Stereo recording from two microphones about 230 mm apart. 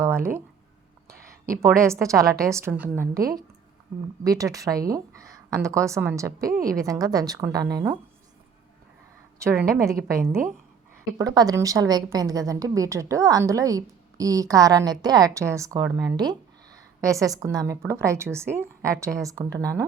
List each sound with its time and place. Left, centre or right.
0.0 s a sound: centre
1.8 s a woman's voice: centre
10.1 s a woman's voice: centre